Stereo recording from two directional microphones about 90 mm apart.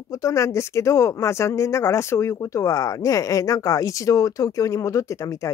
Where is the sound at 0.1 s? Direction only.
35° left (ahead or behind).